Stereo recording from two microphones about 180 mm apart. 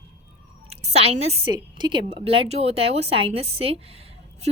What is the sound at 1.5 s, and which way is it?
A woman's voice, 25° right (ahead or behind).